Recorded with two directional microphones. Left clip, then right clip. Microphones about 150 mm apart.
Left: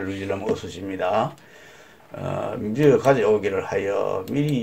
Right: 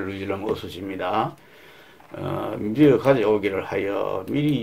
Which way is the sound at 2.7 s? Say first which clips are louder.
Even; 35° right (ahead or behind).